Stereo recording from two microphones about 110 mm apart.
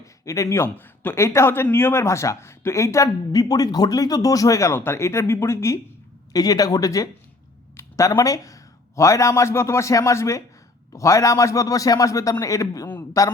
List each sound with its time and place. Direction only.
0.0 s speech: 30° left (ahead or behind)